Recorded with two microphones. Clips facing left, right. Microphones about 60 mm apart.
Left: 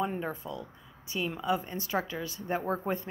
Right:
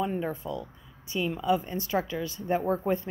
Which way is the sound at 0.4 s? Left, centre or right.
Centre.